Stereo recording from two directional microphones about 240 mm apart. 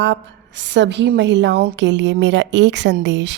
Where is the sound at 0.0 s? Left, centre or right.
Right.